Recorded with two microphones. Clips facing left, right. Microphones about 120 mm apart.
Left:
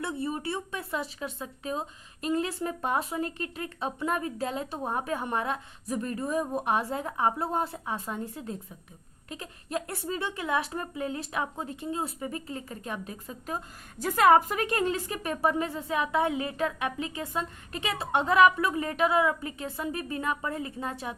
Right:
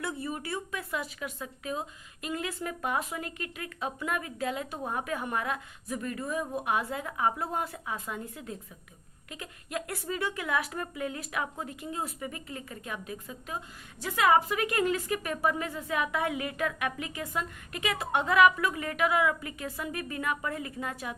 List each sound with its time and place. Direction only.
0.0 s a woman's voice: 30° left (ahead or behind)